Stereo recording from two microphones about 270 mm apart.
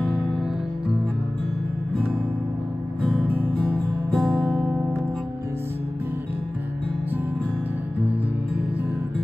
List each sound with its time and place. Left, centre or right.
3.1 s music: centre